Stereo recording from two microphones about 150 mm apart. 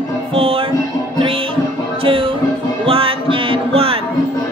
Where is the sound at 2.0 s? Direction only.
35° right (ahead or behind).